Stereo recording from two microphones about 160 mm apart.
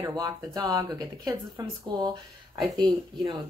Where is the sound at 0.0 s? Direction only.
20° right (ahead or behind).